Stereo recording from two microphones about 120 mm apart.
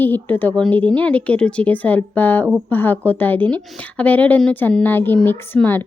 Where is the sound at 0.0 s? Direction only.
15° left (ahead or behind).